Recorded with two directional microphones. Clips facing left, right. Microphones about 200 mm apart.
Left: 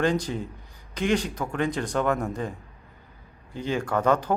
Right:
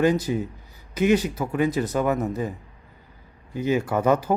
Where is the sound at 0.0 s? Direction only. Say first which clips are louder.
Right 4 dB; 10° right (ahead or behind).